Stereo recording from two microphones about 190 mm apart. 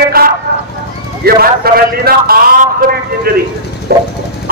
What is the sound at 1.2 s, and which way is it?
A man's voice, 55° right (ahead or behind).